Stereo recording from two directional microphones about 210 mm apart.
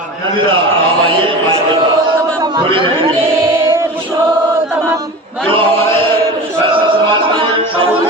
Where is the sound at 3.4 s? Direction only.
15° right (ahead or behind).